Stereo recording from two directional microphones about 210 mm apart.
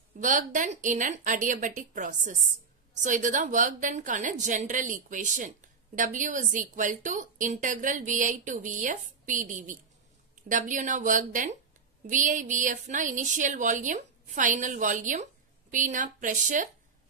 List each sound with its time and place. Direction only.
0.2 s speech: 40° right (ahead or behind)